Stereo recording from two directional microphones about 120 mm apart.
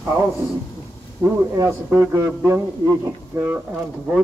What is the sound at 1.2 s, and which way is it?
A man's voice, 25° right (ahead or behind).